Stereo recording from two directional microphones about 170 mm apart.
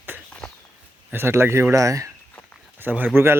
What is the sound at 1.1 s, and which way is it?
Speech, 15° right (ahead or behind).